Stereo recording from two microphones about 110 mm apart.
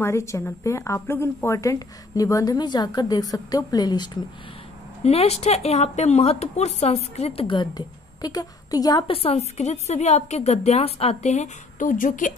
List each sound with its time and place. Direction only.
0.0 s a woman's voice: 25° left (ahead or behind)
5.0 s speech: 70° left (ahead or behind)
7.4 s a woman's voice: 40° left (ahead or behind)
9.0 s a woman's voice: 60° left (ahead or behind); by 11.5 s 90° left